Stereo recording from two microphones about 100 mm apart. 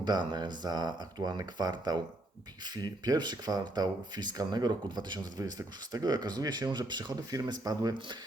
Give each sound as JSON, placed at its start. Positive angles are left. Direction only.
{"t": 0.0, "sound": "speech", "side_deg": -45}